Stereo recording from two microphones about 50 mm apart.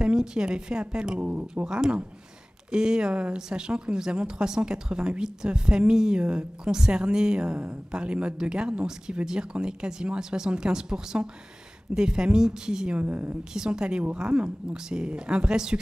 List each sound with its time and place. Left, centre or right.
0.0 s a woman's voice: centre
13.0 s a woman's voice: right
13.4 s speech: centre